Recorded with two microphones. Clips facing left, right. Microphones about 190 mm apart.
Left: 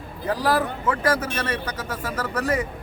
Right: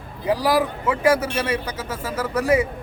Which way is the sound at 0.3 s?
10° right (ahead or behind).